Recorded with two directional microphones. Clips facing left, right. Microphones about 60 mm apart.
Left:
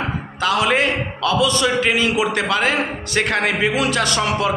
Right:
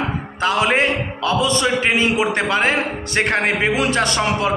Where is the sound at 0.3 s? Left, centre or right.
Right.